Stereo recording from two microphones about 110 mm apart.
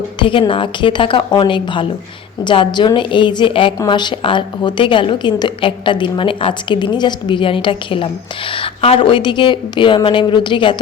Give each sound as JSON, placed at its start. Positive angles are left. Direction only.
{"t": 0.2, "sound": "a woman's voice", "side_deg": 50}